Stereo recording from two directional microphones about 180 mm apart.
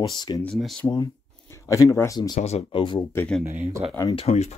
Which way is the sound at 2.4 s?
30° left (ahead or behind).